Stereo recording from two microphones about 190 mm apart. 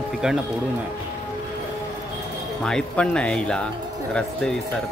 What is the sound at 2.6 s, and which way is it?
Speech, 5° left (ahead or behind).